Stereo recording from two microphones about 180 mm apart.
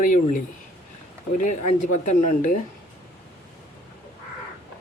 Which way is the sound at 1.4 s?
45° left (ahead or behind).